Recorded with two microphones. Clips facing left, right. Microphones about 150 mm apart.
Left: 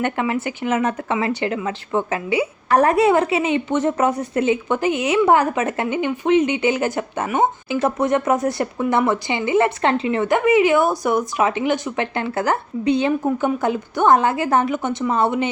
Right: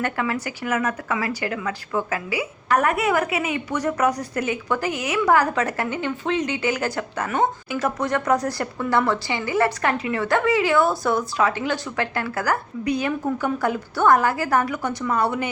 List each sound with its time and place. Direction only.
0.0 s speech: 20° left (ahead or behind)